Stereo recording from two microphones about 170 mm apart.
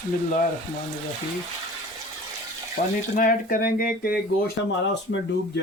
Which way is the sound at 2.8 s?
60° left (ahead or behind).